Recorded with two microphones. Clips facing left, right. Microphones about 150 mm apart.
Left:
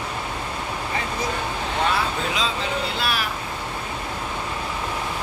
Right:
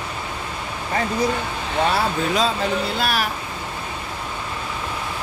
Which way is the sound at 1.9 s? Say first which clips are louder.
Right 4 dB; 45° right (ahead or behind).